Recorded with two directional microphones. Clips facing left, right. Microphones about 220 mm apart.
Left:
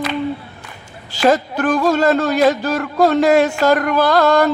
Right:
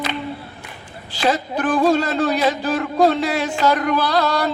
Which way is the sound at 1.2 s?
45° left (ahead or behind).